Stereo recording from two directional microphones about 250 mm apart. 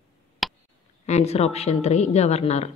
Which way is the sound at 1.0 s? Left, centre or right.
Left.